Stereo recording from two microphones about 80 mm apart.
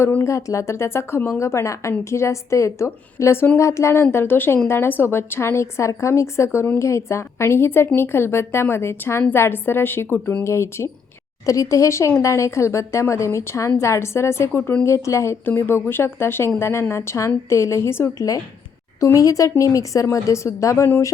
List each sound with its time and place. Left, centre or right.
0.3 s a woman's voice: left